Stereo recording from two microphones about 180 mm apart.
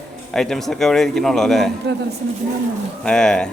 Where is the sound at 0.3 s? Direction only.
Centre (ahead or behind).